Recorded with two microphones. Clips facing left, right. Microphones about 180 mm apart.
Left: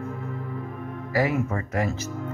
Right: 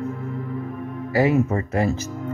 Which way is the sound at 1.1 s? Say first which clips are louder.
Right 5 dB; 25° right (ahead or behind).